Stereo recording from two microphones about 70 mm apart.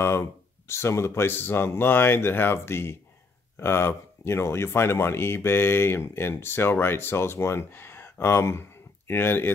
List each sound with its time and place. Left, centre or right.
0.0 s speech: left